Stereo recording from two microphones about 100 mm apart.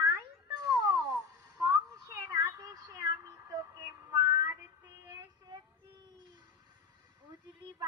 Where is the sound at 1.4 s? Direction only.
35° right (ahead or behind).